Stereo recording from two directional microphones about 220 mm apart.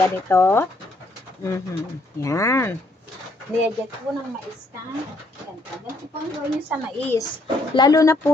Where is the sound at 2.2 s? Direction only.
15° left (ahead or behind).